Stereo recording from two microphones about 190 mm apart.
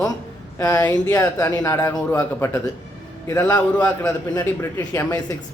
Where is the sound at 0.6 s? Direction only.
20° left (ahead or behind).